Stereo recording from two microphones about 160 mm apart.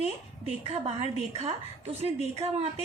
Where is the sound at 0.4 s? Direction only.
40° right (ahead or behind).